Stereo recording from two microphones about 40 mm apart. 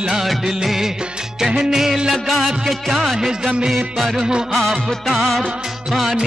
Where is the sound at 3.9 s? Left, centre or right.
Centre.